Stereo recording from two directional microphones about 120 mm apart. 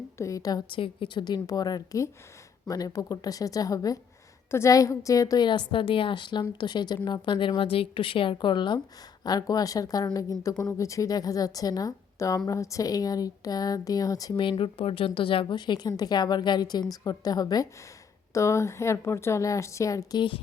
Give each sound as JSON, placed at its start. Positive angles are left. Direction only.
{"t": 0.2, "sound": "a woman's voice", "side_deg": 30}
{"t": 0.7, "sound": "a woman's voice", "side_deg": 45}
{"t": 5.5, "sound": "a woman's voice", "side_deg": 45}